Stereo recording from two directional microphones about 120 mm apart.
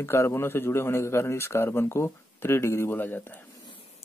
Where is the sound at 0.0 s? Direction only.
20° left (ahead or behind).